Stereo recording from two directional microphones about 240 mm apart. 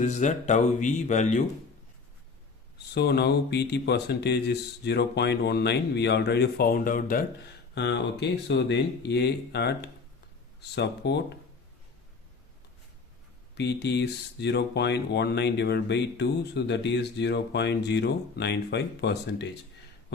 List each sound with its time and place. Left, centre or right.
0.0 s speech: left
2.9 s speech: left
13.6 s speech: left